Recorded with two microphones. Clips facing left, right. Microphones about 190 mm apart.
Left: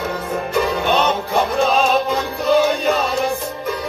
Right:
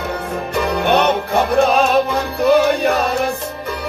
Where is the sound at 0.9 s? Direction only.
60° right (ahead or behind).